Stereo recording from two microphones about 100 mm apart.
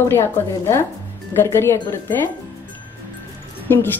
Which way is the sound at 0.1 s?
25° left (ahead or behind).